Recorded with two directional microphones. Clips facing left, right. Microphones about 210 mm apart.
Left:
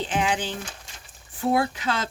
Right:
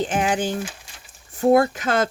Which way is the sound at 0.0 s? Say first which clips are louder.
Right 4 dB; 45° right (ahead or behind).